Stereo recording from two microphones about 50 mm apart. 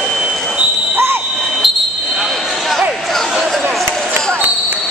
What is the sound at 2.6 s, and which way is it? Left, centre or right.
Basketball bounce, centre.